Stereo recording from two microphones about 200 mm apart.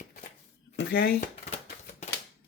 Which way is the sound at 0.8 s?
50° left (ahead or behind).